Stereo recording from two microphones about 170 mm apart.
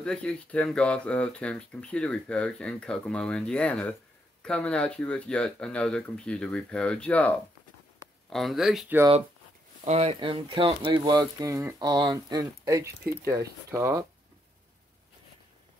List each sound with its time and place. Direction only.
0.0 s speech: 5° left (ahead or behind)
9.8 s speech: 35° right (ahead or behind); by 14.0 s 15° right (ahead or behind)